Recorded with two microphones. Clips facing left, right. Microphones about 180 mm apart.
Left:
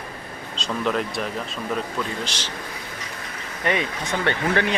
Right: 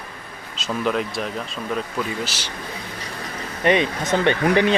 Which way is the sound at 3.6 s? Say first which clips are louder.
Right 6 dB; 20° right (ahead or behind).